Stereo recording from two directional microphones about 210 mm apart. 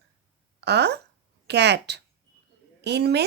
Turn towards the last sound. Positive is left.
turn(degrees=-50)  # may be behind; listen again after turning